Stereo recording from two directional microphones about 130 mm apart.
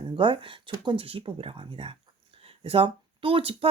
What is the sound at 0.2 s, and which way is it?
Speech, 40° right (ahead or behind).